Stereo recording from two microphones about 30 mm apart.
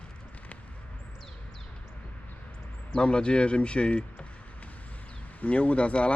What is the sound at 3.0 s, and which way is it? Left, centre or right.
Speech, left.